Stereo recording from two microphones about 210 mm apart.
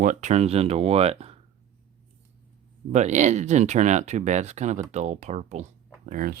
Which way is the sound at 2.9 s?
35° right (ahead or behind).